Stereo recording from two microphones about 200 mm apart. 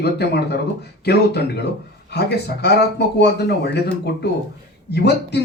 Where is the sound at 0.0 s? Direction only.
55° left (ahead or behind).